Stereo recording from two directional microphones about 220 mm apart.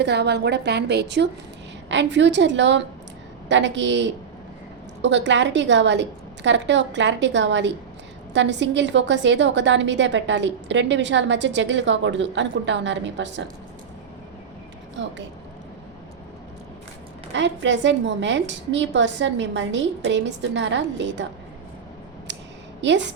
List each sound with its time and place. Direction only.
0.0 s a woman's voice: 50° right (ahead or behind)
17.3 s a woman's voice: 55° right (ahead or behind)
22.3 s a sound: 55° right (ahead or behind)
22.8 s a woman's voice: 55° right (ahead or behind)